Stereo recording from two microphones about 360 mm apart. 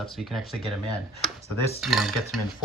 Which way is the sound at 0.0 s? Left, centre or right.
Centre.